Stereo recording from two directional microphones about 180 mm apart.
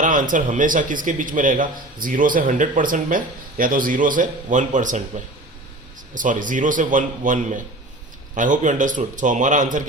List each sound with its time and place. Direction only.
0.0 s a man's voice: 45° right (ahead or behind)